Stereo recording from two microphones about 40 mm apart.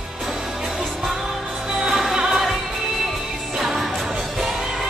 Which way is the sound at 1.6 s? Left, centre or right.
Centre.